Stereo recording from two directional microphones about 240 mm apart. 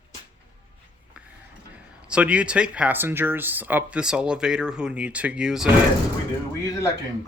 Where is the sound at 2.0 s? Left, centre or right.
Centre.